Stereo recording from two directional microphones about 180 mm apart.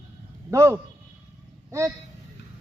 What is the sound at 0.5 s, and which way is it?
Speech, 15° right (ahead or behind).